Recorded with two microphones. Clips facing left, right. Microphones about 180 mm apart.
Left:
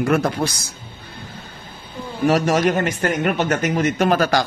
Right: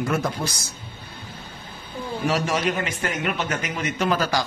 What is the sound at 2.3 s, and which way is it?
Speech, 45° left (ahead or behind).